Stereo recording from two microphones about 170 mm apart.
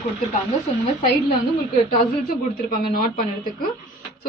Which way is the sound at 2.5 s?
55° left (ahead or behind).